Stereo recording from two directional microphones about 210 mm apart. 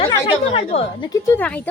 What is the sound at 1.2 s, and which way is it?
Speech, 10° left (ahead or behind).